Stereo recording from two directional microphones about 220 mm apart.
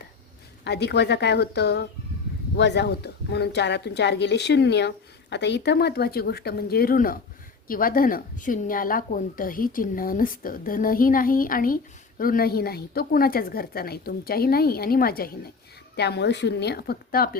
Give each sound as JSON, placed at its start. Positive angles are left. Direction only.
{"t": 0.6, "sound": "a woman's voice", "side_deg": 50}